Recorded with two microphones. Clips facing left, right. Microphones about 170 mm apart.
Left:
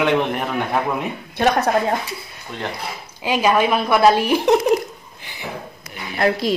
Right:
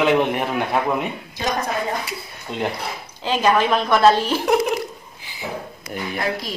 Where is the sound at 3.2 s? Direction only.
10° left (ahead or behind).